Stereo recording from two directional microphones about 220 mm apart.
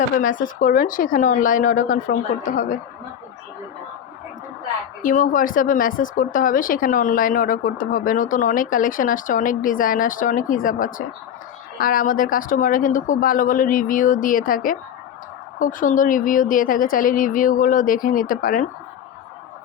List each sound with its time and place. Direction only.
0.2 s speech: 35° left (ahead or behind)
5.0 s speech: 35° left (ahead or behind)